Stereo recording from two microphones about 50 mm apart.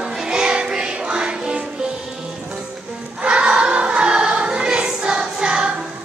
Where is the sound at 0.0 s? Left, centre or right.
Centre.